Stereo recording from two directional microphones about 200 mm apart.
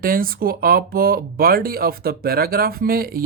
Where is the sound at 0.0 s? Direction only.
45° right (ahead or behind).